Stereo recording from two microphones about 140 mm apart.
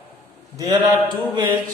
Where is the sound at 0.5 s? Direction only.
30° right (ahead or behind).